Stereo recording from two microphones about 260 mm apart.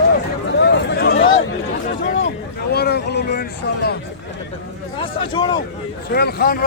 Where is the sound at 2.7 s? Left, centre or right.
Left.